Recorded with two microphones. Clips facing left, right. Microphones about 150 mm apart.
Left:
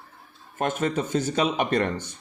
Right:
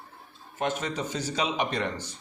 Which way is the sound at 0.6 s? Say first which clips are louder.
Left 4 dB; 50° left (ahead or behind).